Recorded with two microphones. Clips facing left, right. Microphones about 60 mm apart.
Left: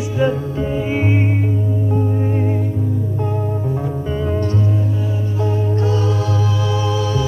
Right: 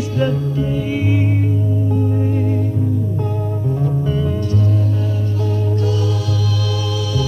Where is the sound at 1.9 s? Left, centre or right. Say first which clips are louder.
Even; left.